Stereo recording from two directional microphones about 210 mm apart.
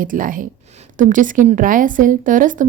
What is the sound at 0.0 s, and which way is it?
A woman's voice, 40° right (ahead or behind).